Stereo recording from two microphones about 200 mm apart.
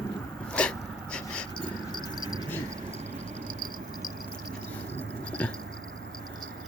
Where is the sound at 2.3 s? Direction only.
15° left (ahead or behind).